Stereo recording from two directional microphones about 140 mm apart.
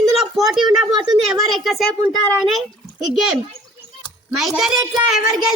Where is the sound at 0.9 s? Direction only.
30° right (ahead or behind).